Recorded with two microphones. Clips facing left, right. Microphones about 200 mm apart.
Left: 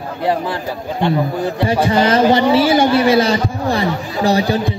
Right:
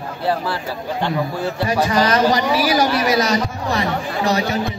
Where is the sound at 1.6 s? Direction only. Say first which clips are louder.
Left 3 dB; 25° left (ahead or behind).